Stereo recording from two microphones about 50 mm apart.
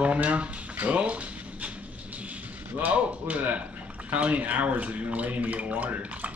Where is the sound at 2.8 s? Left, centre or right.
Right.